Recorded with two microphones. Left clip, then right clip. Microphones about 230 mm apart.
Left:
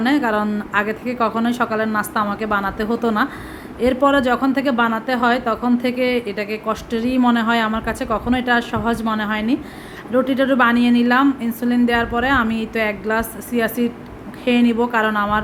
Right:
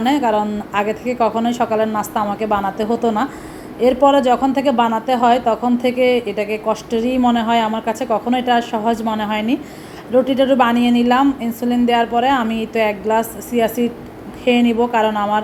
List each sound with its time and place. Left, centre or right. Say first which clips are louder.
0.2 s a woman's voice: right 3 dB; centre
5.8 s a woman's voice: right 4 dB; left
6.7 s speech: right 3 dB; centre
9.3 s a woman's voice: right 2 dB; left
10.1 s a woman's voice: right 3 dB; centre
10.8 s a woman's voice: right 1 dB; left
11.0 s a woman's voice: right 1 dB; centre
14.4 s a woman's voice: right 2 dB; left
14.9 s speech: right 1 dB; centre